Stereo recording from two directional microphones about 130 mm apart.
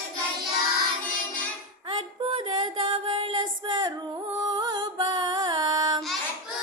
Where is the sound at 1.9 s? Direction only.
40° right (ahead or behind).